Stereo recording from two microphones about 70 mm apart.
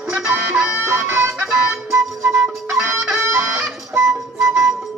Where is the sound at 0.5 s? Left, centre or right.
Right.